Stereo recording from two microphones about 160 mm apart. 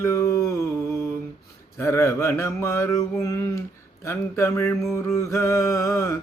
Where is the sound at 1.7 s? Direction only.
15° left (ahead or behind).